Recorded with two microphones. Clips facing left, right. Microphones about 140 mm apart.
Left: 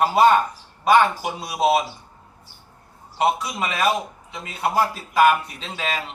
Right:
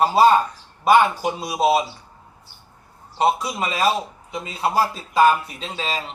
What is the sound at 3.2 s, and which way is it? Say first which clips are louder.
A man's voice: right 1 dB; 30° right (ahead or behind).